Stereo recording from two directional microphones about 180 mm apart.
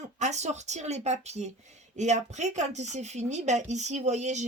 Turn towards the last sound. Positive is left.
turn(degrees=-40)  # may be behind; listen again after turning